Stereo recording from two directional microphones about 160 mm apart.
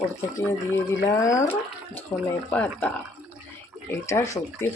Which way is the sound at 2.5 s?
10° left (ahead or behind).